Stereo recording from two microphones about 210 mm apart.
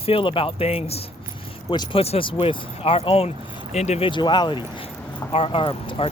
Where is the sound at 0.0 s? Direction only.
25° left (ahead or behind).